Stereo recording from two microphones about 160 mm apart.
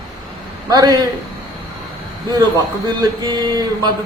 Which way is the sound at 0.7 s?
25° right (ahead or behind).